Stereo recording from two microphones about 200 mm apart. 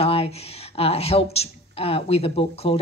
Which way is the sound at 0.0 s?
30° left (ahead or behind).